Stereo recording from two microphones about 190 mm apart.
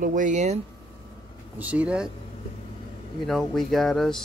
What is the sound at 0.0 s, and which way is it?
Speech, 40° right (ahead or behind).